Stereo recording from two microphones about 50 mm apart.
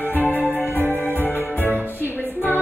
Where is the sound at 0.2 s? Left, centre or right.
Left.